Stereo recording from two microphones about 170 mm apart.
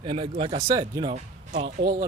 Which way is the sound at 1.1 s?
40° right (ahead or behind).